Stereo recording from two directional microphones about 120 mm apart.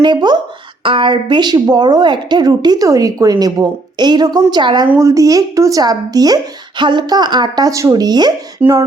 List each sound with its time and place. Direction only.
0.0 s a woman's voice: 35° right (ahead or behind)
4.9 s a woman's voice: 25° right (ahead or behind)